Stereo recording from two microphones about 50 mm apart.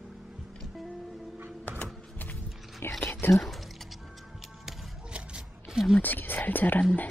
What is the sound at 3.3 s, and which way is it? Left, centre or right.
Speech, centre.